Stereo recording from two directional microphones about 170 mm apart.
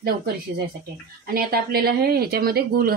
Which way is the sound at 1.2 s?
60° right (ahead or behind).